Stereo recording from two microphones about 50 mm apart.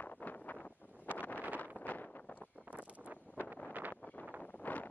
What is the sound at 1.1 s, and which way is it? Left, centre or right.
Wind noise, right.